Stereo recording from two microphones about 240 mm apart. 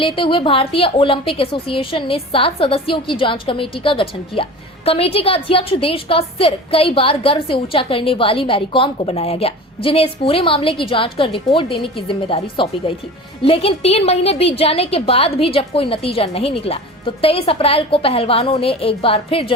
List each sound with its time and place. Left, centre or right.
0.0 s a woman's voice: left